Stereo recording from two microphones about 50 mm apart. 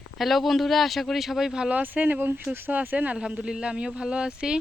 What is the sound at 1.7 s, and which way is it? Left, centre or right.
Speech, right.